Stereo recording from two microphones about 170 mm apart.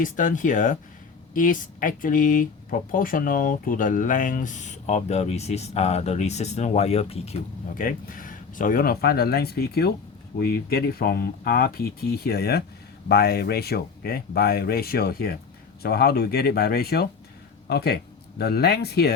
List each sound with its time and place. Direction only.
0.0 s speech: 50° left (ahead or behind)
7.8 s speech: 55° left (ahead or behind)